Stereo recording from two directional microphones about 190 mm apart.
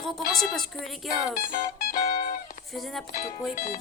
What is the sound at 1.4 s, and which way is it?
Music, 45° left (ahead or behind).